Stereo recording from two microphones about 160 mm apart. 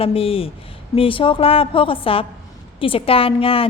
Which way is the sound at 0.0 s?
35° left (ahead or behind).